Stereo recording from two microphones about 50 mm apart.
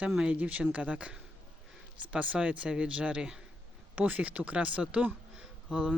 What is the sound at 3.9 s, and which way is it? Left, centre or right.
Speech, right.